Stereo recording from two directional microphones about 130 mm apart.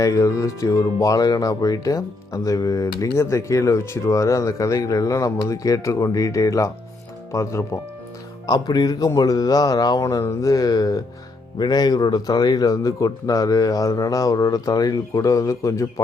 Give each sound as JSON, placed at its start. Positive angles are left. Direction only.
{"t": 0.0, "sound": "speech", "side_deg": 25}